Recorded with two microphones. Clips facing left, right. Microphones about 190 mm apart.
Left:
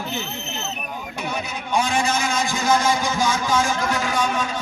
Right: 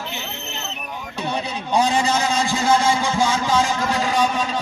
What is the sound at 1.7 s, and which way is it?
A man's voice, 35° right (ahead or behind).